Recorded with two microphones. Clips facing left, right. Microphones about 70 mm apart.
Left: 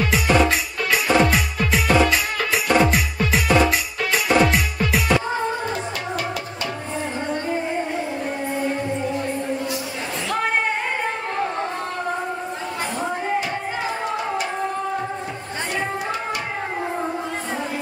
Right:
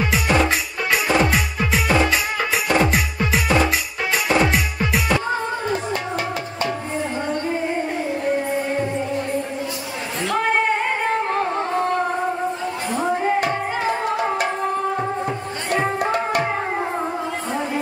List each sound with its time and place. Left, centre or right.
0.1 s music: centre
4.1 s music: centre
16.0 s tabla: right